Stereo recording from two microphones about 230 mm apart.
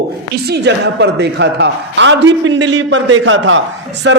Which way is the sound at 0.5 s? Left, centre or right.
Right.